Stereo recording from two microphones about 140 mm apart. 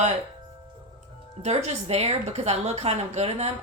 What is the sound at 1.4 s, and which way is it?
A woman's voice, 50° right (ahead or behind).